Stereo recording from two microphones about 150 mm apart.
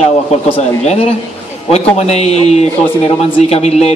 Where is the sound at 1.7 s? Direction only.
45° left (ahead or behind).